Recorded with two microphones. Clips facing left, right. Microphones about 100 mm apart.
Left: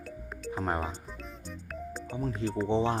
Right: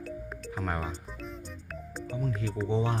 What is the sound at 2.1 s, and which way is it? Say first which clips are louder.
Speech: left 1 dB; 30° left (ahead or behind).